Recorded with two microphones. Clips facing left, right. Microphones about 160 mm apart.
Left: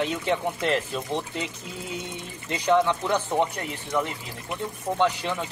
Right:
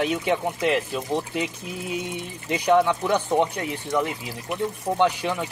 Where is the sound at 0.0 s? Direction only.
15° right (ahead or behind).